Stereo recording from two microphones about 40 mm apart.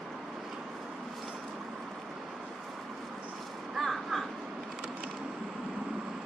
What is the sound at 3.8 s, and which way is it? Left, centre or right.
Crow, centre.